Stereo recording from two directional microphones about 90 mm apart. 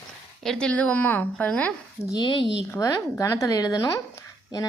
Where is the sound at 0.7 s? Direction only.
15° left (ahead or behind).